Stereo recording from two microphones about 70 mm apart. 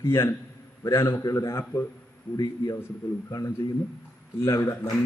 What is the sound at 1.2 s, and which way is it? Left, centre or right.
Speech, left.